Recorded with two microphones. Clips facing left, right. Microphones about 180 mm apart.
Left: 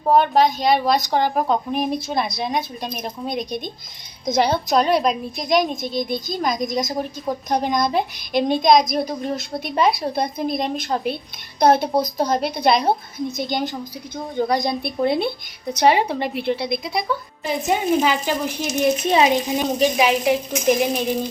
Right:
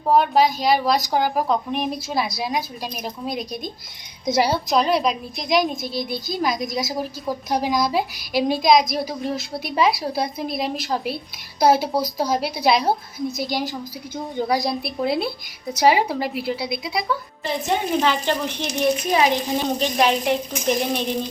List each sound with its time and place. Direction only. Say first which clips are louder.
0.0 s a woman's voice: left 1 dB; centre (ahead or behind)
19.0 s speech: left 3 dB; 25° left (ahead or behind)
19.5 s a woman's voice: left 2 dB; 5° left (ahead or behind)